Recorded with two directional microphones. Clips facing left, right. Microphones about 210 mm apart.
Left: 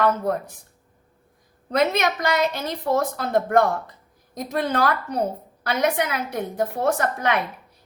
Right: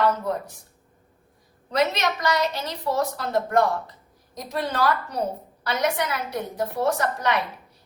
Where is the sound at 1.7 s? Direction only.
55° left (ahead or behind).